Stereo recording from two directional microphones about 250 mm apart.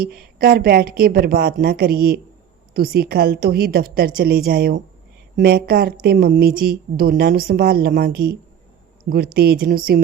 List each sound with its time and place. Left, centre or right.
0.0 s speech: right